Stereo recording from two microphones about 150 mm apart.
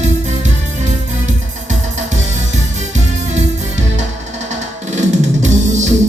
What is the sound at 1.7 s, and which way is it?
Music, 50° right (ahead or behind).